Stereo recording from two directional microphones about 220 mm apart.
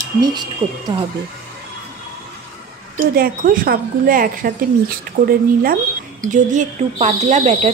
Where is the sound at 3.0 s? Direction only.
40° right (ahead or behind).